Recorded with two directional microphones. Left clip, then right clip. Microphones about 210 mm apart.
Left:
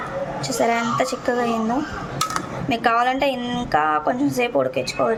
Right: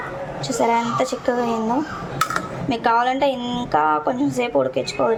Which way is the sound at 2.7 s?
Centre (ahead or behind).